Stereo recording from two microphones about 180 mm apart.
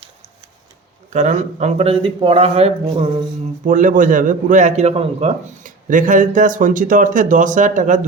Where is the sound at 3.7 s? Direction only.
45° right (ahead or behind).